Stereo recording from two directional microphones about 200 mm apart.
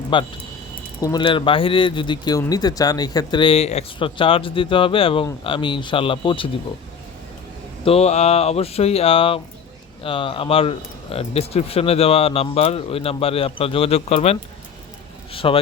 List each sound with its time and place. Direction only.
0.1 s speech: 25° left (ahead or behind)
7.9 s speech: 30° left (ahead or behind)